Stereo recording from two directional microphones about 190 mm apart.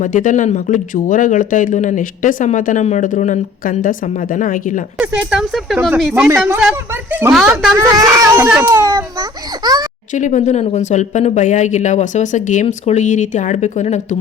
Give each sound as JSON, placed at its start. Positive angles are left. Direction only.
{"t": 0.0, "sound": "speech", "side_deg": 45}
{"t": 4.9, "sound": "speech", "side_deg": -5}
{"t": 7.5, "sound": "speech", "side_deg": 0}
{"t": 7.8, "sound": "speech", "side_deg": -15}
{"t": 10.2, "sound": "speech", "side_deg": 40}